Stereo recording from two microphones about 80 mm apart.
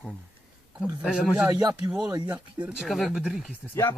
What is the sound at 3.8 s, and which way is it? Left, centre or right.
Speech, left.